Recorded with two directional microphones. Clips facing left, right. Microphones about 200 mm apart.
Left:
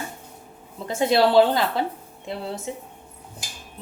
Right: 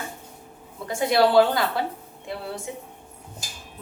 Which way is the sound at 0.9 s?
25° left (ahead or behind).